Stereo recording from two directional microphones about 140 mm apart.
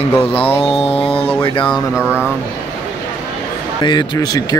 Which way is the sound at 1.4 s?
35° left (ahead or behind).